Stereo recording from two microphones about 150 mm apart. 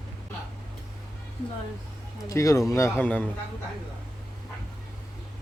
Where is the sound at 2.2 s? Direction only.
20° left (ahead or behind).